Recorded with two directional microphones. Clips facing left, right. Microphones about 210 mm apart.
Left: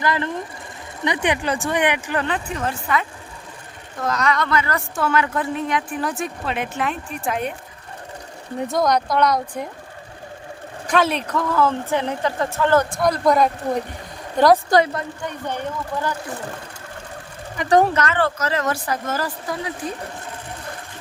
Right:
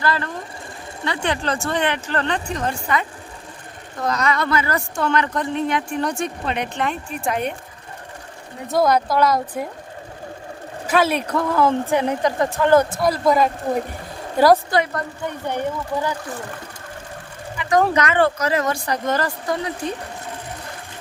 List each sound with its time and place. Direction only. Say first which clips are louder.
0.0 s a woman's voice: left 1 dB; 15° left (ahead or behind); by 4.8 s 10° right (ahead or behind)
4.9 s a woman's voice: left 1 dB; 5° left (ahead or behind)
8.7 s a woman's voice: right 2 dB; 5° right (ahead or behind)
10.8 s a woman's voice: right 1 dB; 5° right (ahead or behind)
13.0 s a woman's voice: even; 5° right (ahead or behind)
17.9 s a woman's voice: right 3 dB; 15° right (ahead or behind)
18.6 s a woman's voice: right 1 dB; 5° left (ahead or behind)